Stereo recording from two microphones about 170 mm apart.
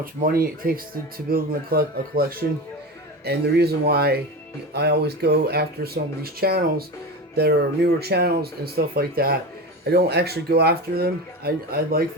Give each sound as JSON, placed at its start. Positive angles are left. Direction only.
{"t": 0.0, "sound": "speech", "side_deg": -60}